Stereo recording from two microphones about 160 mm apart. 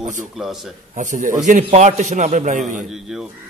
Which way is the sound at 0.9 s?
50° right (ahead or behind).